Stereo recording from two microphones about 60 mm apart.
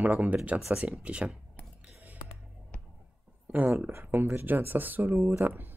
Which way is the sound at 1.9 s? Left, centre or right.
Right.